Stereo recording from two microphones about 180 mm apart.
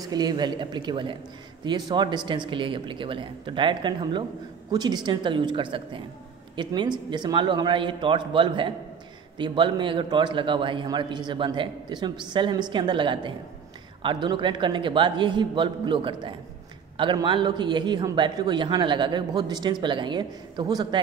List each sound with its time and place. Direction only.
0.1 s a man's voice: 20° right (ahead or behind)